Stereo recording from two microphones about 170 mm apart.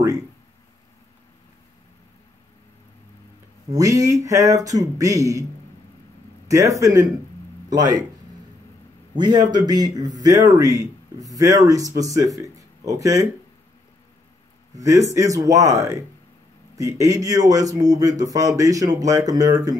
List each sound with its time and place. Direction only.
3.7 s a man's voice: 20° right (ahead or behind)
6.5 s a man's voice: 20° right (ahead or behind)
9.1 s a man's voice: 25° right (ahead or behind)
12.5 s a sound: 20° right (ahead or behind)
14.8 s a man's voice: 20° right (ahead or behind)